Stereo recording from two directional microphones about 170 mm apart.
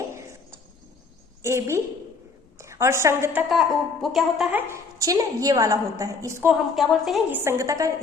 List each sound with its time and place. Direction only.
1.4 s a woman's voice: 15° right (ahead or behind)
3.5 s speech: centre (ahead or behind)
4.7 s a woman's voice: 20° right (ahead or behind)
6.5 s a woman's voice: centre (ahead or behind); by 7.9 s 20° right (ahead or behind)